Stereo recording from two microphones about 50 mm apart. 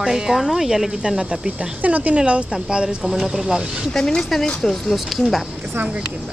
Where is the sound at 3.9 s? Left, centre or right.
Centre.